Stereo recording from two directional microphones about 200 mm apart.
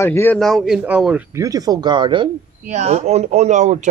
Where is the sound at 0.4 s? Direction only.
Centre (ahead or behind).